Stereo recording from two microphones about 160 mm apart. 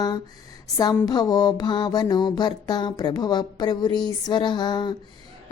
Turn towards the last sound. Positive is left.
turn(degrees=25)  # may be behind; listen again after turning